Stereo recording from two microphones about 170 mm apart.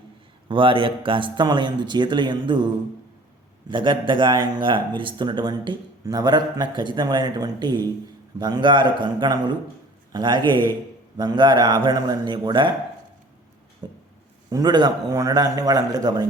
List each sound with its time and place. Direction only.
0.4 s speech: 30° right (ahead or behind)
3.7 s speech: 30° right (ahead or behind)
13.8 s a sound: 25° right (ahead or behind)
14.5 s speech: 25° right (ahead or behind)